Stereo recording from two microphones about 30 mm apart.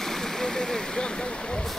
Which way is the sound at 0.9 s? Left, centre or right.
Left.